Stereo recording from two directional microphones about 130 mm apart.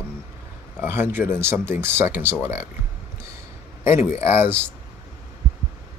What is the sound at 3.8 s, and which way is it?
Speech, 20° right (ahead or behind).